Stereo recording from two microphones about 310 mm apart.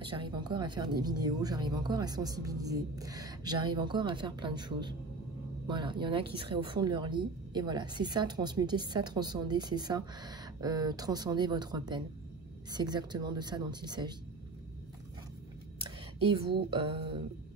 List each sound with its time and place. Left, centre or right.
0.0 s speech: centre
16.2 s speech: centre